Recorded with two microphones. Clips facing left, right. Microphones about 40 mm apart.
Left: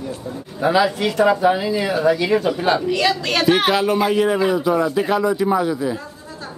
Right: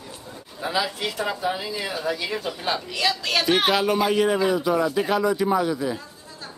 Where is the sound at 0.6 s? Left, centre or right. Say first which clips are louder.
Left 9 dB; centre.